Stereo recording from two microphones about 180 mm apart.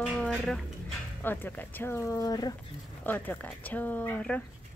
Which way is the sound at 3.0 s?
10° left (ahead or behind).